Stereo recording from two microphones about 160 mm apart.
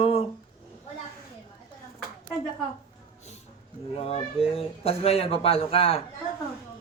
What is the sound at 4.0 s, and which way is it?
Speech, 40° left (ahead or behind).